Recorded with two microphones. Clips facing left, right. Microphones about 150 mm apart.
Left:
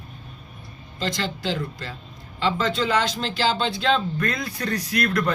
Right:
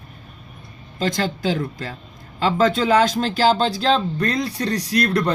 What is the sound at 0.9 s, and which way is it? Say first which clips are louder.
Speech: right 5 dB; 45° right (ahead or behind).